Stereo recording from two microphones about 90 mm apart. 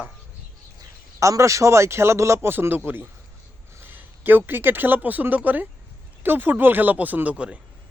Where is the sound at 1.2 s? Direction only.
35° right (ahead or behind); by 7.6 s 15° right (ahead or behind).